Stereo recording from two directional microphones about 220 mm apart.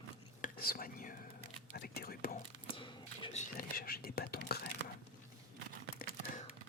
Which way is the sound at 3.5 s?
45° left (ahead or behind).